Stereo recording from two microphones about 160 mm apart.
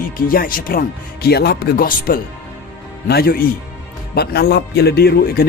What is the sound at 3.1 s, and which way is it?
Speech, 80° left.